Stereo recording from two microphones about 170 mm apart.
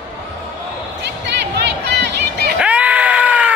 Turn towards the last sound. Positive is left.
turn(degrees=-10)  # may be behind; listen again after turning